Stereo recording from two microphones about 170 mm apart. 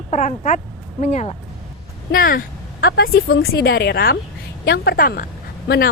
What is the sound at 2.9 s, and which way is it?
A woman's voice, 70° left (ahead or behind).